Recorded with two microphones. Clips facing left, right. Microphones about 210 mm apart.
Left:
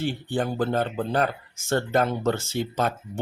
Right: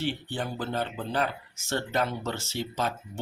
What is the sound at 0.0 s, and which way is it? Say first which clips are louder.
Speech: left 5 dB; 50° left (ahead or behind).